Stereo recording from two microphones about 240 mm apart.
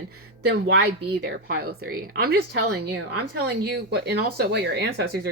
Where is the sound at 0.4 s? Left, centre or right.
Right.